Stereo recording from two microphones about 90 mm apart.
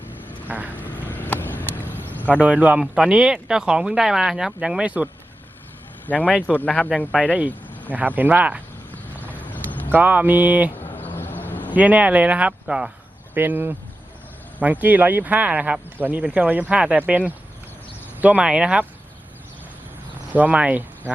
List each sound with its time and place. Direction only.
0.1 s vehicle: 20° left (ahead or behind)
0.4 s vehicle: 20° right (ahead or behind)
0.9 s a sound: 20° left (ahead or behind)
2.4 s speech: 15° right (ahead or behind)
6.1 s speech: 20° left (ahead or behind)
7.2 s speech: 15° right (ahead or behind)
9.2 s horse: 20° left (ahead or behind)
9.9 s speech: 20° right (ahead or behind)
10.8 s a sound: 20° left (ahead or behind)
11.7 s speech: 15° right (ahead or behind)
13.3 s speech: 20° right (ahead or behind)
20.3 s speech: 15° right (ahead or behind)